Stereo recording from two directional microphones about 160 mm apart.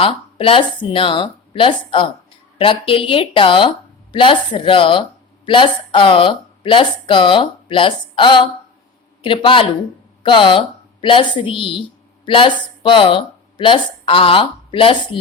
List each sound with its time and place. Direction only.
0.0 s a woman's voice: 35° left (ahead or behind)